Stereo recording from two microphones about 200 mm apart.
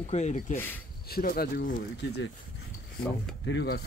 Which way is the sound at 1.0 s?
50° left (ahead or behind).